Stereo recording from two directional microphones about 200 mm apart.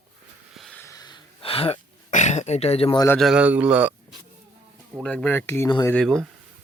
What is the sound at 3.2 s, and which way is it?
Speech, 5° right (ahead or behind).